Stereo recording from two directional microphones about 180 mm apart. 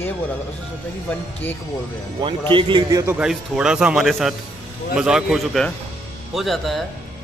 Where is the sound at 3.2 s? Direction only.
5° right (ahead or behind).